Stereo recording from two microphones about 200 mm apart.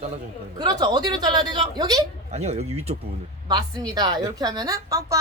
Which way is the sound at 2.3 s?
35° right (ahead or behind).